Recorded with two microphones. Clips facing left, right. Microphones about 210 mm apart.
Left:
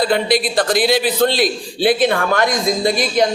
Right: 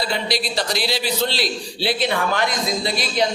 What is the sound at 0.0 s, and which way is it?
A man's voice, 50° left (ahead or behind).